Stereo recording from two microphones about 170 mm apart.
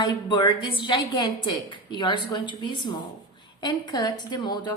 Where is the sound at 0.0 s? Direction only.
25° left (ahead or behind).